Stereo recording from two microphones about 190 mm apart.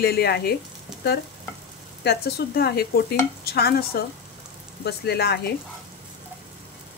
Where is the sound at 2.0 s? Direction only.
55° left (ahead or behind).